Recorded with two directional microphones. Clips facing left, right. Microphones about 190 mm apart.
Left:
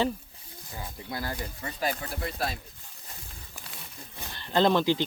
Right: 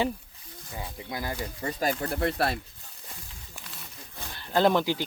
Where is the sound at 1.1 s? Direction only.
15° right (ahead or behind).